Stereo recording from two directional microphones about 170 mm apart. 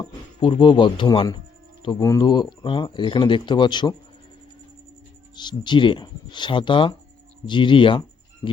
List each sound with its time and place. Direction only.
0.0 s speech: 30° left (ahead or behind)
5.4 s speech: 25° left (ahead or behind)